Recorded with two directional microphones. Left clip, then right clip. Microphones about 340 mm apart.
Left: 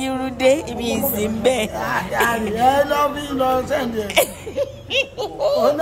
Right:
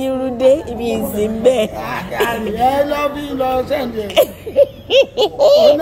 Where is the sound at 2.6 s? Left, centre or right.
Left.